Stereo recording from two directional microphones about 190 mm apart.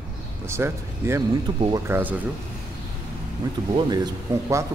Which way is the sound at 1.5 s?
25° right (ahead or behind).